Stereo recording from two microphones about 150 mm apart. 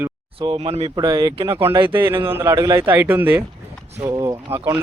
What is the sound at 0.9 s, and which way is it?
A man's voice, 25° right (ahead or behind).